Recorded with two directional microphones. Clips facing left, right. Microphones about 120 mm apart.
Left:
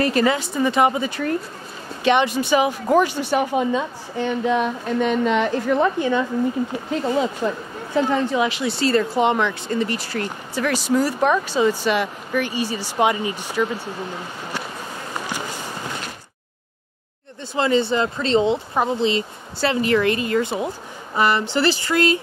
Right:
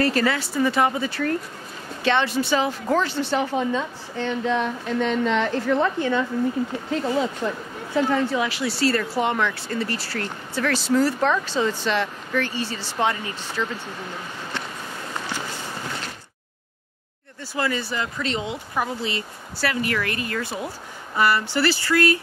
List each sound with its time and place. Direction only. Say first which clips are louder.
0.0 s speech: left 3 dB; 20° left (ahead or behind)
7.4 s speech: left 3 dB; 20° left (ahead or behind)
17.6 s speech: left 7 dB; 25° left (ahead or behind)